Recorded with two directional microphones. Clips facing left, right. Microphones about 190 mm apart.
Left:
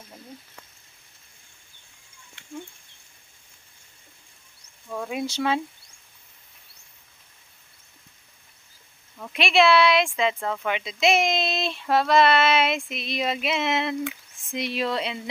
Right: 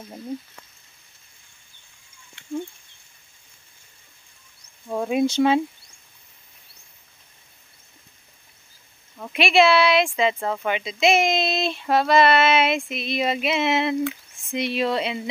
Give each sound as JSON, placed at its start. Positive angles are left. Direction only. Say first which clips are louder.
{"t": 4.8, "sound": "speech", "louder": "right 8 dB", "side_deg": -25}
{"t": 9.2, "sound": "speech", "louder": "right 2 dB", "side_deg": -5}